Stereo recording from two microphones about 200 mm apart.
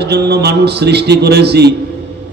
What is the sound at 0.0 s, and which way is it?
Speech, 55° right (ahead or behind).